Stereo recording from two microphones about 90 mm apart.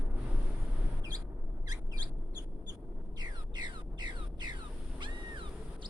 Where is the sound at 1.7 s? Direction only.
45° right (ahead or behind); by 5.9 s 60° right (ahead or behind).